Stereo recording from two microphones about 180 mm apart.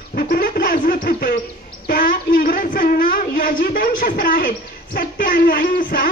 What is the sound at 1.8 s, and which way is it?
A woman's voice, 50° left (ahead or behind).